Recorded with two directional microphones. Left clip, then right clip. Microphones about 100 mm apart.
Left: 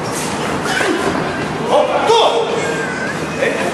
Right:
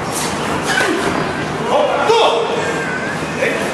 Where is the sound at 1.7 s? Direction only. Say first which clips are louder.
Left 1 dB; 15° left (ahead or behind).